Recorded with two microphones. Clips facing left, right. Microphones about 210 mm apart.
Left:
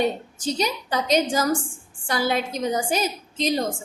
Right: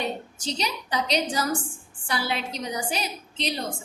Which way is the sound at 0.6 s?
45° left (ahead or behind).